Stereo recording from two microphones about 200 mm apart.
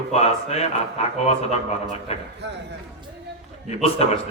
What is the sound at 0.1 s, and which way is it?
Speech, 30° left (ahead or behind).